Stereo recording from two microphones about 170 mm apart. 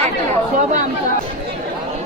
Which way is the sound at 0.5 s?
45° right (ahead or behind).